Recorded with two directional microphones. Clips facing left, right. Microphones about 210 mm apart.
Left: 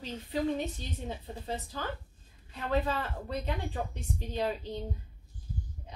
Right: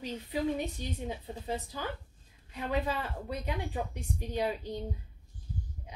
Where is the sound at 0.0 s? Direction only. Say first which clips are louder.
Even; 10° right (ahead or behind).